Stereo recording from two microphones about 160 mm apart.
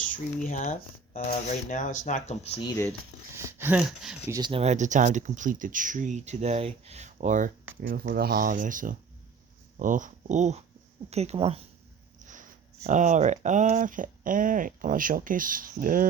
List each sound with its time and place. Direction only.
0.3 s speech: 55° left (ahead or behind)
3.3 s speech: 10° right (ahead or behind)
4.3 s speech: 25° right (ahead or behind)
4.6 s speech: 45° right (ahead or behind)
7.8 s speech: 80° right; by 11.6 s 40° right (ahead or behind)
12.3 s speech: 50° right (ahead or behind)